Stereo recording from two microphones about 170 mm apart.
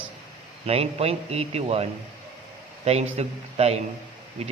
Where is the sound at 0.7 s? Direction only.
35° right (ahead or behind).